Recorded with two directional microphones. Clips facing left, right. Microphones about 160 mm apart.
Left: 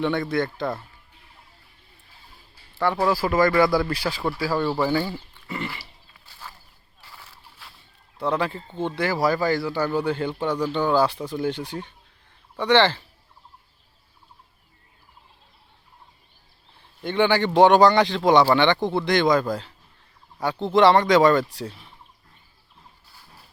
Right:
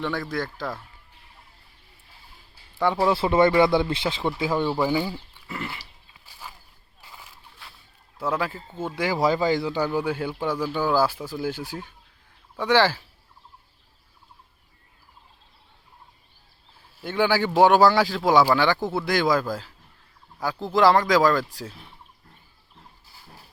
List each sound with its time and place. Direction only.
0.0 s speech: centre (ahead or behind)
2.7 s speech: 15° right (ahead or behind)
5.5 s dog: centre (ahead or behind)
7.0 s a sound: 15° right (ahead or behind)
7.6 s a sound: centre (ahead or behind)
8.2 s speech: 5° right (ahead or behind)
16.7 s speech: 5° right (ahead or behind)